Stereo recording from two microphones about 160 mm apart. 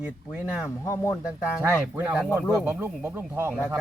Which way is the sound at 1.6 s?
15° right (ahead or behind).